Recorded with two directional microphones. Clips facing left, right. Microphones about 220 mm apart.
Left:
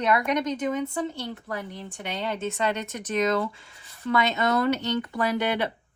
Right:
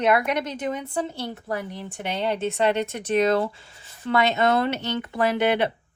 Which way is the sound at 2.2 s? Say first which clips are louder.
Right 5 dB; 30° right (ahead or behind).